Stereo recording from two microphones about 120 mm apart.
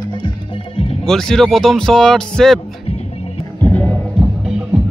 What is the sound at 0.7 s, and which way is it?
Music, 55° left (ahead or behind).